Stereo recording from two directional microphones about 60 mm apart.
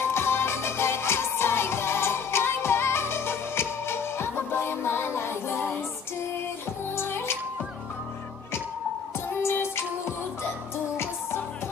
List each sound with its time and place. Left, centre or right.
0.0 s music: left
7.0 s music: left
9.4 s music: left